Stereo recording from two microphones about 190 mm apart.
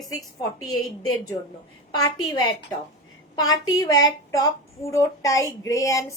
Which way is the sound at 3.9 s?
20° left (ahead or behind).